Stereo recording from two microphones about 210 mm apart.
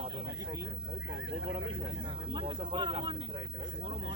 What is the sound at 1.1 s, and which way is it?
Speech, 65° right (ahead or behind).